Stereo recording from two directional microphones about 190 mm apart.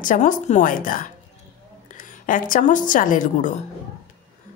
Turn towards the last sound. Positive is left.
turn(degrees=45)  # may be behind; listen again after turning